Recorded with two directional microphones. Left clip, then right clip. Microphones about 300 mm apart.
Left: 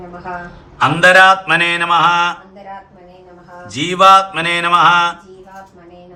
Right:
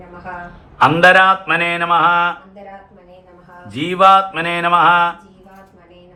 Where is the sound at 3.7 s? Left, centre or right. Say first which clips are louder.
Left 2 dB; centre.